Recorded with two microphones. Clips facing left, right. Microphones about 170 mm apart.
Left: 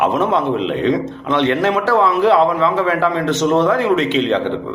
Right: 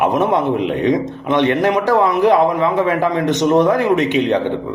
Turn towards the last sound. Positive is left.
turn(degrees=-15)  # may be behind; listen again after turning